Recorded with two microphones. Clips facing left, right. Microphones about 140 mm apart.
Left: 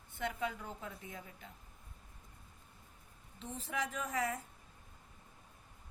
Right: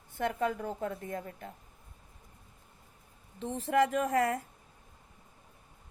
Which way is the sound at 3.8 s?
50° right (ahead or behind).